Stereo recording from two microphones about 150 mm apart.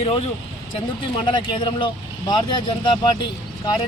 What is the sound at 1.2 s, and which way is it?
Speech, 30° left (ahead or behind).